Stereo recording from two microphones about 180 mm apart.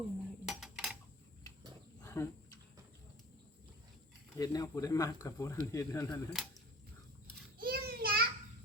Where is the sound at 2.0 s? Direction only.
20° left (ahead or behind).